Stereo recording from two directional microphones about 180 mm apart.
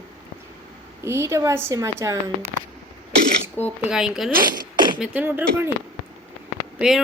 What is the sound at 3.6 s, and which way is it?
Speech, 10° right (ahead or behind).